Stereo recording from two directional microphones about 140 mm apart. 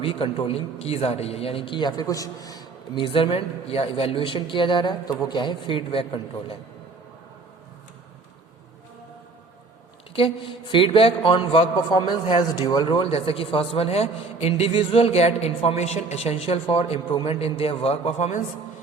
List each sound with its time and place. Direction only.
0.0 s a man's voice: 40° left (ahead or behind)
10.2 s a man's voice: 40° left (ahead or behind); by 18.4 s 55° left (ahead or behind)